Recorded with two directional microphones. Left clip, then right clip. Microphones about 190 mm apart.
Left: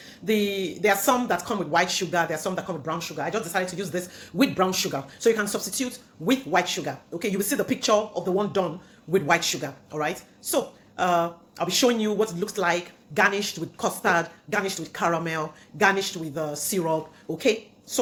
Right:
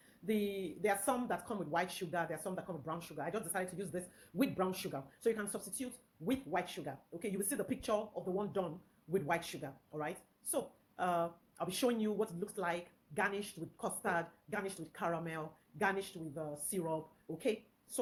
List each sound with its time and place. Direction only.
0.3 s speech: 5° right (ahead or behind)